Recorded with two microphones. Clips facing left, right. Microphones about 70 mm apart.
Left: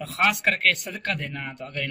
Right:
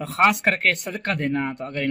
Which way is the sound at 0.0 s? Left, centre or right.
Right.